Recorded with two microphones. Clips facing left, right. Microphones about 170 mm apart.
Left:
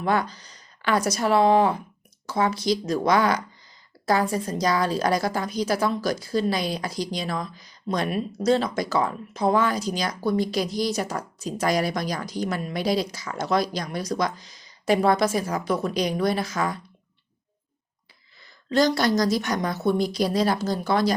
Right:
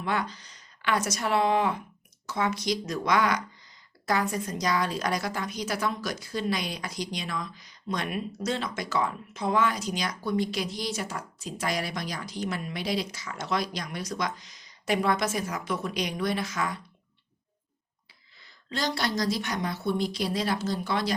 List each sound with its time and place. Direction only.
0.0 s a woman's voice: 40° left (ahead or behind)
18.7 s a woman's voice: 45° left (ahead or behind)